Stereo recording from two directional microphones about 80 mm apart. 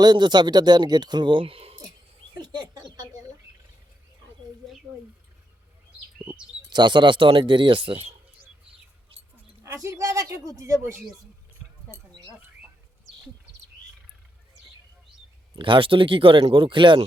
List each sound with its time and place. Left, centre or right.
0.0 s speech: right
2.4 s a sound: right
6.2 s speech: right
9.8 s speech: right
15.5 s speech: right